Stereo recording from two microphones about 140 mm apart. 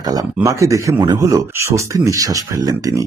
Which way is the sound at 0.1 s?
25° right (ahead or behind).